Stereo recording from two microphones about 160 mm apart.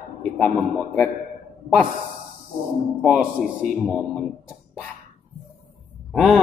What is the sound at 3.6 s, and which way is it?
Speech, 50° right (ahead or behind).